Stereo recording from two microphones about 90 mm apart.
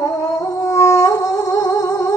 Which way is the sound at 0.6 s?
35° left (ahead or behind).